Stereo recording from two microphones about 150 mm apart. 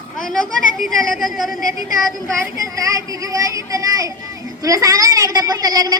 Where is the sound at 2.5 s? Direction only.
20° right (ahead or behind).